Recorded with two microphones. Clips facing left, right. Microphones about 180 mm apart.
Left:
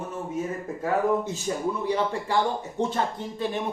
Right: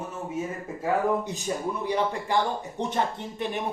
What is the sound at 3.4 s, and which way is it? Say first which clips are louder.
Speech: left 2 dB; 15° right (ahead or behind).